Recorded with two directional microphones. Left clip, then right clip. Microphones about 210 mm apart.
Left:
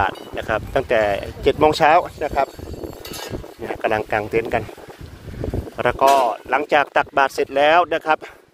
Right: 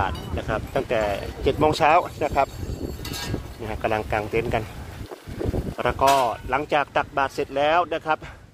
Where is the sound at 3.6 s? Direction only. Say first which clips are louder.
Left 4 dB; 25° left (ahead or behind).